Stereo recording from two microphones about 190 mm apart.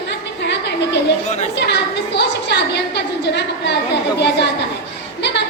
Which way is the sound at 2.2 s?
60° left (ahead or behind).